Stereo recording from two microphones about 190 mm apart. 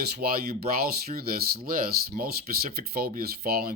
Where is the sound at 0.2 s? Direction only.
55° right (ahead or behind).